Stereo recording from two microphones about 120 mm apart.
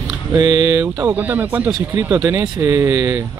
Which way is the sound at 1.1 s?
15° right (ahead or behind).